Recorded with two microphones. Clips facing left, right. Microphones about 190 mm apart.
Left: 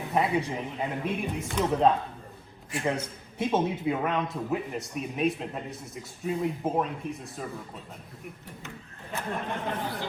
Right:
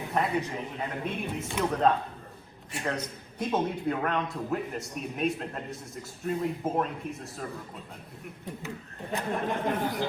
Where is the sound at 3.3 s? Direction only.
5° left (ahead or behind).